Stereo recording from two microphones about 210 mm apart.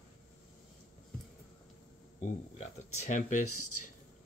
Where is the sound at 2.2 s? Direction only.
35° left (ahead or behind).